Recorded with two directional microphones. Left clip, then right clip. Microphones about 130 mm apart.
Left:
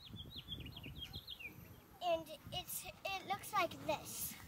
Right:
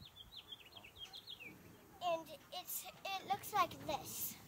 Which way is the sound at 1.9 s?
30° right (ahead or behind).